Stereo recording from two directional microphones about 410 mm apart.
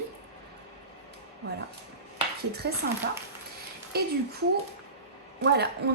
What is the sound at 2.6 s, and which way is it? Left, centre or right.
Speech, right.